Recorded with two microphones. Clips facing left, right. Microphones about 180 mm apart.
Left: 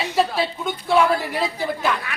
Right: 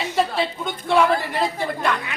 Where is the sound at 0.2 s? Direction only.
5° left (ahead or behind).